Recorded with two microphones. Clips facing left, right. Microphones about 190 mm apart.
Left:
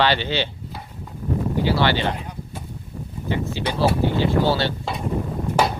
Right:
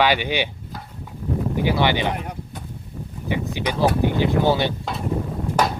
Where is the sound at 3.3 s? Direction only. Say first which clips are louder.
Even; 15° right (ahead or behind).